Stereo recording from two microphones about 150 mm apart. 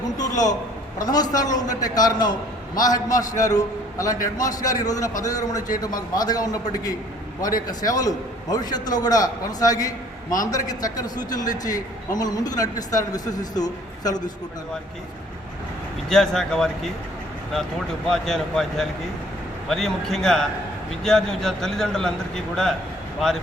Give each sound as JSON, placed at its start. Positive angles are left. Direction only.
{"t": 0.2, "sound": "a sound", "side_deg": 25}
{"t": 0.9, "sound": "a man's voice", "side_deg": 25}
{"t": 16.0, "sound": "speech", "side_deg": 0}
{"t": 18.1, "sound": "speech", "side_deg": 0}